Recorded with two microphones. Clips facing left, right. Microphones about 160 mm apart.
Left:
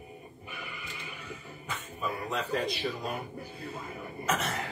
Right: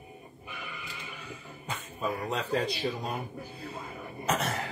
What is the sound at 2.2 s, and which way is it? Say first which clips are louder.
Speech: even; 35° right (ahead or behind).